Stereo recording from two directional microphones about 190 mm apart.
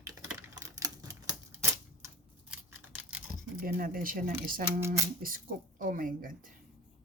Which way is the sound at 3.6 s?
50° right (ahead or behind).